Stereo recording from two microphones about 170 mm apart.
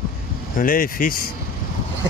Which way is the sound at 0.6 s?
55° left (ahead or behind).